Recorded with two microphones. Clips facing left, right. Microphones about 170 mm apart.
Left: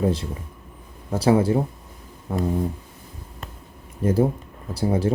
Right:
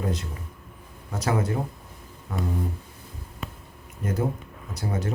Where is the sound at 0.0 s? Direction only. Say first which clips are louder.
Left 7 dB; 30° left (ahead or behind).